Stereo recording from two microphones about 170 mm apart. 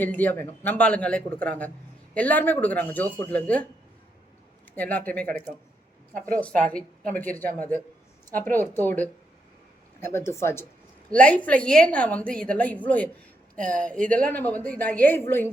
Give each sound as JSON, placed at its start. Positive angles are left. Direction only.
{"t": 0.0, "sound": "a woman's voice", "side_deg": 10}
{"t": 4.7, "sound": "a woman's voice", "side_deg": 10}
{"t": 14.0, "sound": "speech", "side_deg": -50}
{"t": 14.3, "sound": "a woman's voice", "side_deg": 10}